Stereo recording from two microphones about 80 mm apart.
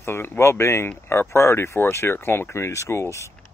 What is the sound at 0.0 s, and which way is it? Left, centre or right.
Speech, left.